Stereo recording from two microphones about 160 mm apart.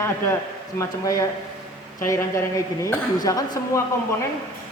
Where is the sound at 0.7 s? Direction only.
20° left (ahead or behind).